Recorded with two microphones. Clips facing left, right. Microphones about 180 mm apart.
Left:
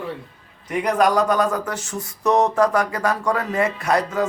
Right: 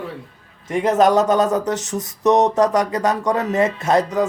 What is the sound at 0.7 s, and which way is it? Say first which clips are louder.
Speech: right 3 dB; 25° right (ahead or behind).